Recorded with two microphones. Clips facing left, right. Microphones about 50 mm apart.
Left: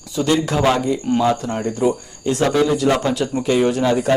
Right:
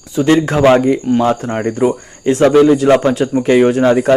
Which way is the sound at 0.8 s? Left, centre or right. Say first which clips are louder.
Right 5 dB; right.